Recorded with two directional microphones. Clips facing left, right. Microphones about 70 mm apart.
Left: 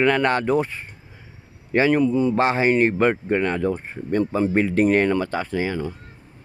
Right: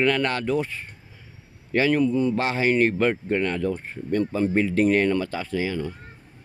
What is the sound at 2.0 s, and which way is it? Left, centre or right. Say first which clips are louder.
Speech: left 2 dB; centre.